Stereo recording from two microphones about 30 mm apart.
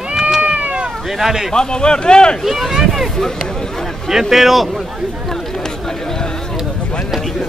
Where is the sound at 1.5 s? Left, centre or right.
Left.